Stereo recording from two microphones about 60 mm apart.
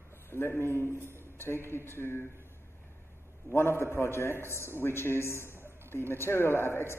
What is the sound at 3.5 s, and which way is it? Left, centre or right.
A man's voice, left.